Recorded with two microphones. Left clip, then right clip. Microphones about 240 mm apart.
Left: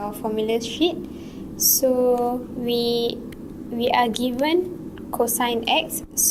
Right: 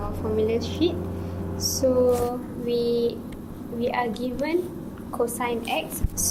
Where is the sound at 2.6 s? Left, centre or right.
Left.